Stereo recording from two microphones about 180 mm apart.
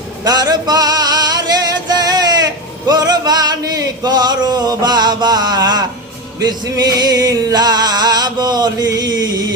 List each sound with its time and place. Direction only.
0.3 s music: 20° right (ahead or behind)